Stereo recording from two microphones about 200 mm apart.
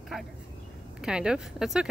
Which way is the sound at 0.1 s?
Centre (ahead or behind).